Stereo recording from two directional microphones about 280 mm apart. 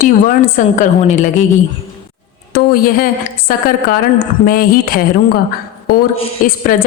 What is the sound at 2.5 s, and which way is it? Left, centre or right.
A woman's voice, left.